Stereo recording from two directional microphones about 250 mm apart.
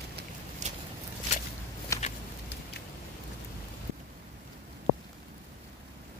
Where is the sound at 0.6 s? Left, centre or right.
Right.